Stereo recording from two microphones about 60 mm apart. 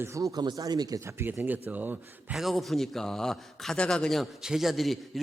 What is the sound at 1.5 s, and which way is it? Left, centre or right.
Speech, right.